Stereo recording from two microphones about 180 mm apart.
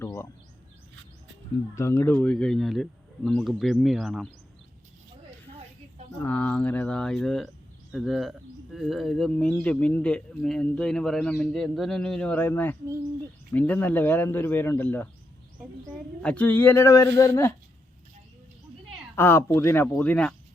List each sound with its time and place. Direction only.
0.0 s a sound: 15° left (ahead or behind)
1.7 s speech: 15° left (ahead or behind)
6.1 s speech: 10° left (ahead or behind)
16.2 s speech: 10° left (ahead or behind)
19.1 s speech: 15° left (ahead or behind)